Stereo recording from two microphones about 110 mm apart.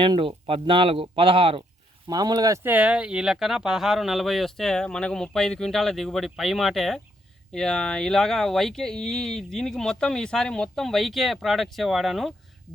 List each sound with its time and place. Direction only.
0.0 s speech: 50° right (ahead or behind)
2.0 s speech: 35° right (ahead or behind)
2.6 s speech: 10° right (ahead or behind)